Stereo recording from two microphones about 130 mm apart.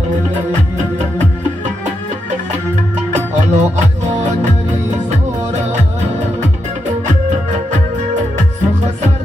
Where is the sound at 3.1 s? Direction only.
65° right (ahead or behind).